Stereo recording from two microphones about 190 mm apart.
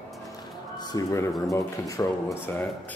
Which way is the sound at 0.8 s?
20° left (ahead or behind).